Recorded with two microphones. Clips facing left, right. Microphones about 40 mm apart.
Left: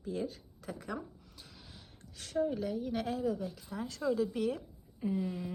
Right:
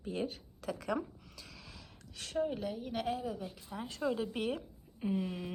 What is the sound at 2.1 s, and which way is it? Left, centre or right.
Speech, right.